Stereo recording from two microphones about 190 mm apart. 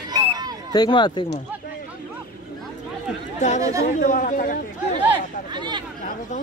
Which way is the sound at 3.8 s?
40° left (ahead or behind).